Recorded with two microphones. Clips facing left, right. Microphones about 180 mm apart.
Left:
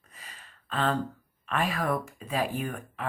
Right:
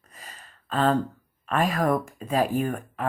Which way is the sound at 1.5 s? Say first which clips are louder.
Right 5 dB; 40° right (ahead or behind).